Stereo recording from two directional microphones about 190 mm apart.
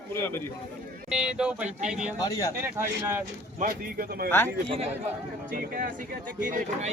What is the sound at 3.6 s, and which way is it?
Speech, 45° right (ahead or behind).